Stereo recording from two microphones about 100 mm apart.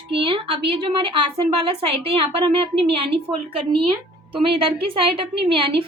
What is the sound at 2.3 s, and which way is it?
Speech, 70° right (ahead or behind).